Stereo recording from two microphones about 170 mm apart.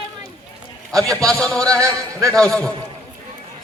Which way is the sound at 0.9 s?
5° left (ahead or behind).